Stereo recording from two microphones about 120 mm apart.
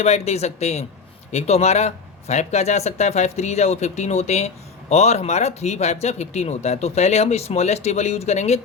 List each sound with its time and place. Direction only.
0.0 s speech: 65° left (ahead or behind)